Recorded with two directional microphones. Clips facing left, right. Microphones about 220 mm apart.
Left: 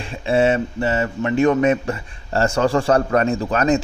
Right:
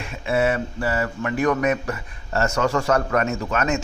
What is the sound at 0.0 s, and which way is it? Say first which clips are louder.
A man's voice: left 4 dB; 30° left (ahead or behind).